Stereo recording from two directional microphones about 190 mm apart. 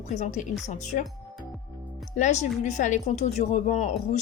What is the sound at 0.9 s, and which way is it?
Speech, 50° left (ahead or behind).